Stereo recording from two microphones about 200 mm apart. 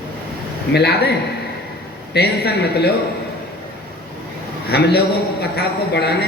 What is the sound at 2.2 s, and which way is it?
Speech, 55° left (ahead or behind).